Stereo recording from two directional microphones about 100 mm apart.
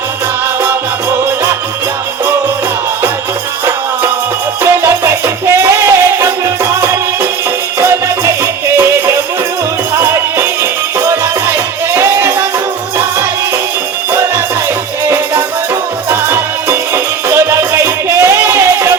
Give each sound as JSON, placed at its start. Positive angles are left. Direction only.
{"t": 0.6, "sound": "music", "side_deg": -25}
{"t": 4.6, "sound": "music", "side_deg": -25}
{"t": 7.8, "sound": "music", "side_deg": -30}
{"t": 14.1, "sound": "music", "side_deg": -25}